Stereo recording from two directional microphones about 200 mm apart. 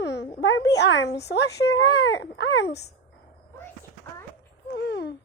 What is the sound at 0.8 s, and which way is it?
A woman's voice, 60° left (ahead or behind).